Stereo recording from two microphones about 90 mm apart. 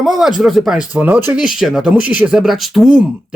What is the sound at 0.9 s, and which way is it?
Speech, 15° right (ahead or behind).